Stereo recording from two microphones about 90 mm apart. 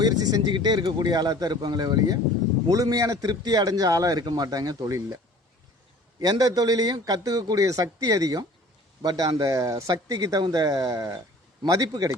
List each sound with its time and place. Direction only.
0.0 s a man's voice: 45° right (ahead or behind)
6.1 s a man's voice: 50° right (ahead or behind)
10.4 s a man's voice: 50° right (ahead or behind)